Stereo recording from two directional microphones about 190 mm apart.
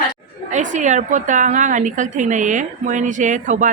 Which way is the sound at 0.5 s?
40° right (ahead or behind).